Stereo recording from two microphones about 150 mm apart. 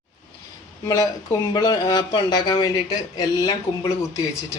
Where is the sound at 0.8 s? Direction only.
25° left (ahead or behind).